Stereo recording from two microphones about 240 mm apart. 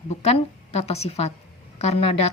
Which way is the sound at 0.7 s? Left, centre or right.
Left.